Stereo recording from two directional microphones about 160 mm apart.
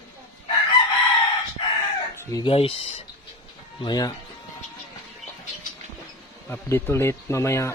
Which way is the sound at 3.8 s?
25° left (ahead or behind).